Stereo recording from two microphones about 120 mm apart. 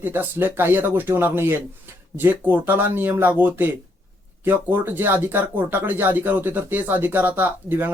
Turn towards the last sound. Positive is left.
turn(degrees=-15)  # may be behind; listen again after turning